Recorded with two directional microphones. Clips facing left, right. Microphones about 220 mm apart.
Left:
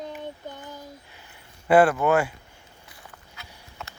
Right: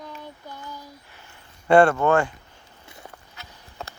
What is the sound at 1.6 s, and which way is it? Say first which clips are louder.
Speech: right 2 dB; 5° left (ahead or behind).